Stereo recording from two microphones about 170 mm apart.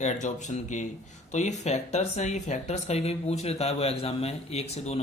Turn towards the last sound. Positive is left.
turn(degrees=40)  # may be behind; listen again after turning